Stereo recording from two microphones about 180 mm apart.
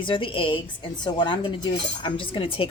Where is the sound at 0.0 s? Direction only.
30° left (ahead or behind).